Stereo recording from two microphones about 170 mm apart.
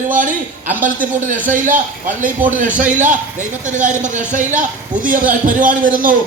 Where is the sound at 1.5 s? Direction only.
50° right (ahead or behind).